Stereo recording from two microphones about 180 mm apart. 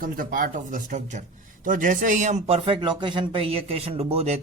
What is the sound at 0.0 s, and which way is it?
A man's voice, 50° right (ahead or behind).